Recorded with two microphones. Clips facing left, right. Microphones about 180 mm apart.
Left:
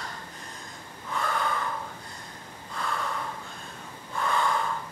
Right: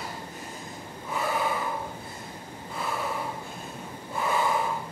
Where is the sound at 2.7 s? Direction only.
10° right (ahead or behind).